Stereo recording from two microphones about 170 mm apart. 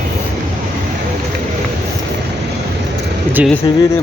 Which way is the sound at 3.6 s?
25° left (ahead or behind).